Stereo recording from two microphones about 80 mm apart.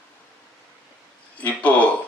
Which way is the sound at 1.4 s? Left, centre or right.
Centre.